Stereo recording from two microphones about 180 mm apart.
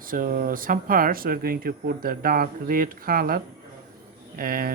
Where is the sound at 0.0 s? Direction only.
50° right (ahead or behind).